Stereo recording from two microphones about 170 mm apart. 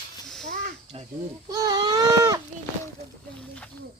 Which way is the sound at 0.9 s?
35° right (ahead or behind).